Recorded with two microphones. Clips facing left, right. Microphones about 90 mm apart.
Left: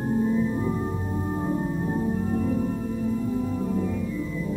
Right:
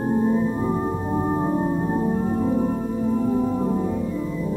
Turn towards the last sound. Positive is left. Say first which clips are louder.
# right 4 dB
turn(degrees=-35)  # may be behind; listen again after turning